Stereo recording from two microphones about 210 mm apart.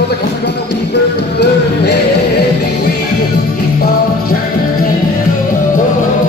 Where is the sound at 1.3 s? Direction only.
50° left (ahead or behind).